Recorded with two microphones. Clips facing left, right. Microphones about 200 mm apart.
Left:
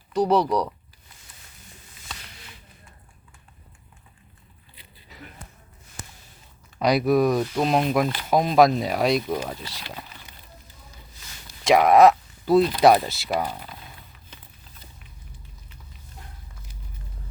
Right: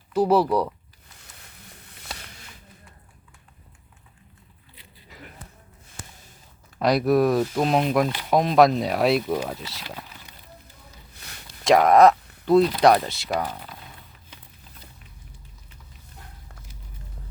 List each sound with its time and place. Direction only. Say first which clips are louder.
0.1 s speech: right 1 dB; 5° right (ahead or behind)
1.6 s a sound: right 3 dB; 60° right (ahead or behind)
6.7 s speech: even; centre (ahead or behind)
11.6 s speech: even; centre (ahead or behind)